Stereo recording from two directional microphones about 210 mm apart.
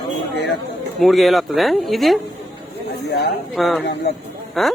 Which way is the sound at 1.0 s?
Centre (ahead or behind).